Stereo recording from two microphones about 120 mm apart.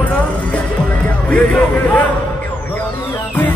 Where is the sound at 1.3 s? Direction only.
10° left (ahead or behind).